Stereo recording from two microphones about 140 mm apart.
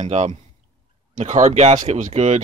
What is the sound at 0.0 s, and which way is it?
Speech, 55° right (ahead or behind).